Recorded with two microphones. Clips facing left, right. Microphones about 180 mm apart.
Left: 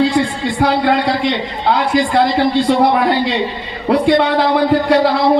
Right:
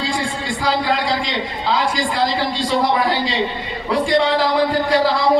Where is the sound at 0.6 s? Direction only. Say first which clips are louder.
Left 6 dB; 60° left (ahead or behind).